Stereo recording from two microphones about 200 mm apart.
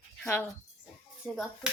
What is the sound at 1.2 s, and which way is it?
Speech, 10° right (ahead or behind).